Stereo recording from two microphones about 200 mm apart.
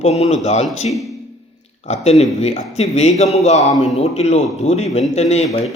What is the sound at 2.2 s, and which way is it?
Speech, 30° left (ahead or behind).